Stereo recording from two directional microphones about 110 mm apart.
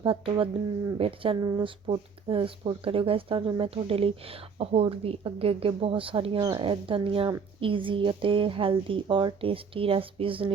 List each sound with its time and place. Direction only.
0.0 s speech: 50° right (ahead or behind)